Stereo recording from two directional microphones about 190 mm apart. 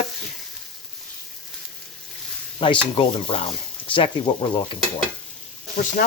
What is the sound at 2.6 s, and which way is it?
Speech, 25° left (ahead or behind).